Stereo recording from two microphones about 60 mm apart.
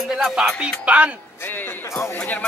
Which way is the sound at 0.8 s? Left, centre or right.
Right.